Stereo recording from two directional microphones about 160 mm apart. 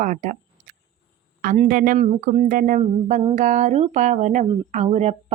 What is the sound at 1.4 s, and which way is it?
Speech, 55° right (ahead or behind).